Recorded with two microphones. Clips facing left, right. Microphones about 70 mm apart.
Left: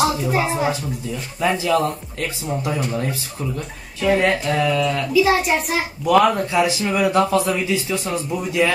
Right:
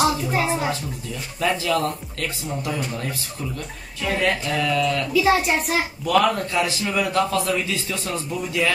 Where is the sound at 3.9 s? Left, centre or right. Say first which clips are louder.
Left 5 dB; centre.